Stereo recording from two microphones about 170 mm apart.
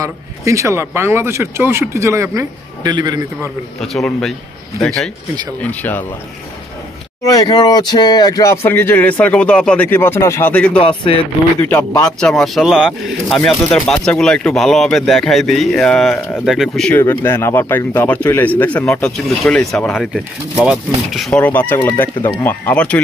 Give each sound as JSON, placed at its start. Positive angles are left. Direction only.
{"t": 0.0, "sound": "speech", "side_deg": -20}
{"t": 3.8, "sound": "speech", "side_deg": 0}
{"t": 7.2, "sound": "speech", "side_deg": 25}
{"t": 10.8, "sound": "speech", "side_deg": 30}
{"t": 11.7, "sound": "speech", "side_deg": 20}
{"t": 12.2, "sound": "speech", "side_deg": 5}
{"t": 17.0, "sound": "speech", "side_deg": 15}